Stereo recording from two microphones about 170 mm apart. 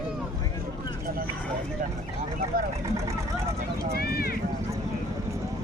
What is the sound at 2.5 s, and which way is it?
Speech, 55° right (ahead or behind).